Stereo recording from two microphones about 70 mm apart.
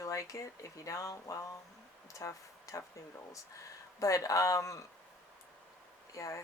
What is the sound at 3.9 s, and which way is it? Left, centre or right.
Speech, left.